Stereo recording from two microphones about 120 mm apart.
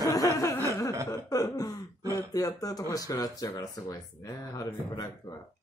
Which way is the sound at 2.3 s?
30° left (ahead or behind).